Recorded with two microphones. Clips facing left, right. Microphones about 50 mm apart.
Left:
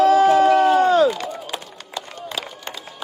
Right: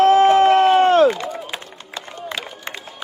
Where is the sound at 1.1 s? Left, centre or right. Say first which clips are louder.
Right 1 dB; right.